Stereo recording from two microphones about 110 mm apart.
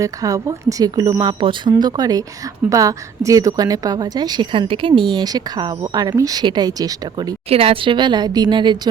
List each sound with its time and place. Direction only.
0.0 s a woman's voice: 30° right (ahead or behind)
1.2 s speech: 45° right (ahead or behind)
1.8 s a woman's voice: 35° right (ahead or behind)
7.5 s speech: 60° right (ahead or behind); by 8.9 s 45° right (ahead or behind)